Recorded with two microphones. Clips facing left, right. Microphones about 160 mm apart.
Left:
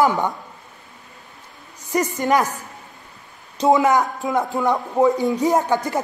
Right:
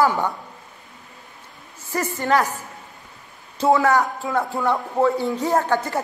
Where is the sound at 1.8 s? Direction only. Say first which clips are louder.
Left 4 dB; 20° left (ahead or behind).